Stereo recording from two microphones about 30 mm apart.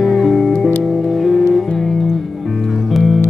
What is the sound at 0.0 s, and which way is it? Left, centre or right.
Music, centre.